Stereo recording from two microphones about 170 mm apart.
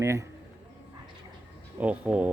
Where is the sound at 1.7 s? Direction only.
10° right (ahead or behind).